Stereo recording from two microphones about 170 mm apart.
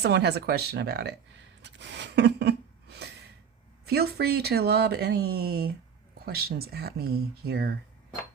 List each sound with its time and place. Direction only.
0.0 s speech: 75° right (ahead or behind)
1.6 s a sound: 90° right
3.8 s speech: 70° right (ahead or behind)